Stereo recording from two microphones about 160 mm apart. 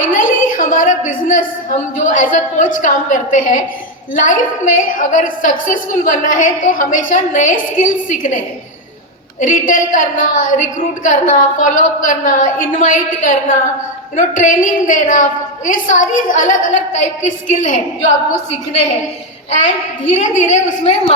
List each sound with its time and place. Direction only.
0.1 s a woman's voice: 55° left (ahead or behind)